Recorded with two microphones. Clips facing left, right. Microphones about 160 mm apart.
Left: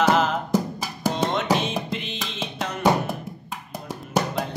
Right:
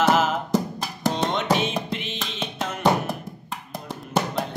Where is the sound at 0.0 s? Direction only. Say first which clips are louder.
Even; 5° right (ahead or behind).